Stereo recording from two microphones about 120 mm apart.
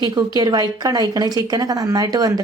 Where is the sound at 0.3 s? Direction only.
30° right (ahead or behind).